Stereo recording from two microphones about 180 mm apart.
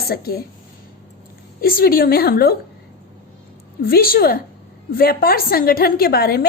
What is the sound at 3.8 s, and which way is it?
A woman's voice, 55° left (ahead or behind).